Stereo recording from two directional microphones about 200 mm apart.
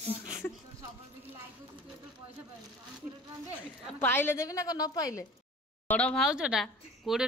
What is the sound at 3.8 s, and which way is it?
A woman's voice, 10° left (ahead or behind).